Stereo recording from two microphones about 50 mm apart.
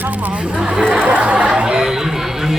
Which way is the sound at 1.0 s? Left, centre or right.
Right.